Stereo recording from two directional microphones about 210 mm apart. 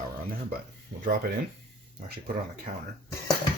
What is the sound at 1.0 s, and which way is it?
Speech, 45° right (ahead or behind).